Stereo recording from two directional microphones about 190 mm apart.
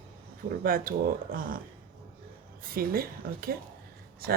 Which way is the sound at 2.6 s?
50° right (ahead or behind).